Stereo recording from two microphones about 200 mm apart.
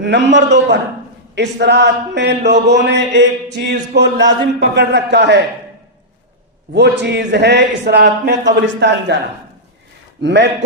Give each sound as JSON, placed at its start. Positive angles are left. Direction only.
{"t": 0.0, "sound": "speech", "side_deg": -60}
{"t": 6.7, "sound": "speech", "side_deg": -60}